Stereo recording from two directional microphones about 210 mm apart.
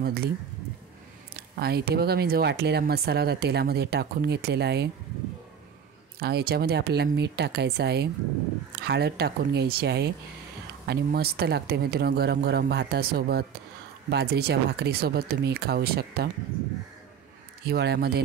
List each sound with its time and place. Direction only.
0.0 s speech: 50° right (ahead or behind)
1.3 s speech: 50° right (ahead or behind)
6.1 s speech: 50° right (ahead or behind)
17.6 s speech: 50° right (ahead or behind)